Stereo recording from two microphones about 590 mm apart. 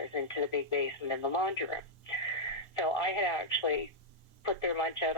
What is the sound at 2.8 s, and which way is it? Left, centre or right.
Speech, left.